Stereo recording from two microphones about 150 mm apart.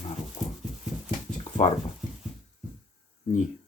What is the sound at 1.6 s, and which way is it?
Speech, 55° left (ahead or behind).